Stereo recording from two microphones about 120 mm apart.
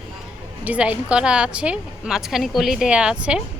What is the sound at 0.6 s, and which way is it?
A woman's voice, 10° right (ahead or behind).